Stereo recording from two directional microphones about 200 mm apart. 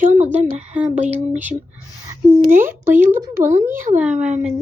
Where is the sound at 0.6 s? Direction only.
5° right (ahead or behind).